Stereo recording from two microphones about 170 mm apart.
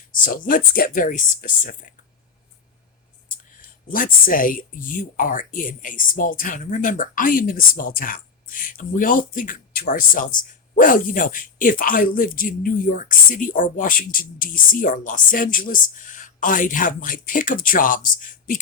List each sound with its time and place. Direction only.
0.3 s speech: 55° left (ahead or behind)
3.2 s speech: 55° left (ahead or behind)